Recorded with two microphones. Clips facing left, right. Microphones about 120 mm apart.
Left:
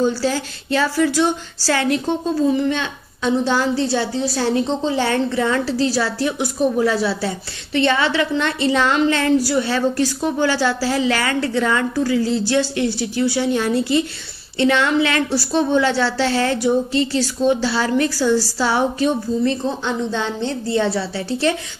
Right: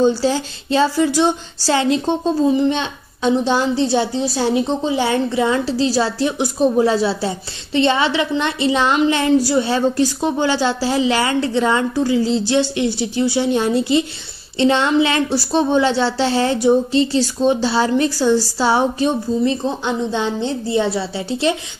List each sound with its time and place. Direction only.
0.0 s a woman's voice: 25° right (ahead or behind)